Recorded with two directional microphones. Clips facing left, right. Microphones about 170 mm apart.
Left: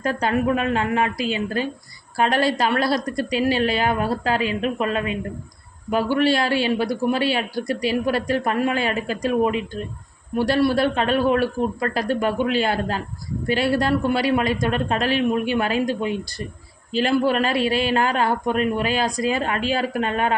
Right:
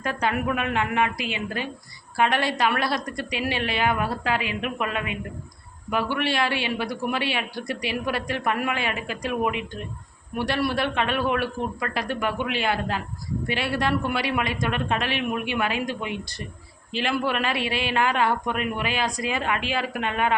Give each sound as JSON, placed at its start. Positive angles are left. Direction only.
{"t": 0.0, "sound": "a man's voice", "side_deg": 35}